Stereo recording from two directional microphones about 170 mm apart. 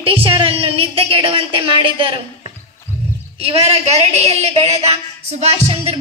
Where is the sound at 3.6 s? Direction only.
35° right (ahead or behind).